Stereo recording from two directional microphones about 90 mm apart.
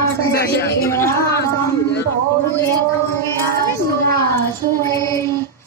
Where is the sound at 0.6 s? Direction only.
30° left (ahead or behind).